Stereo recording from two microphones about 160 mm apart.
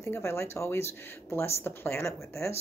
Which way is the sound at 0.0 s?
15° left (ahead or behind).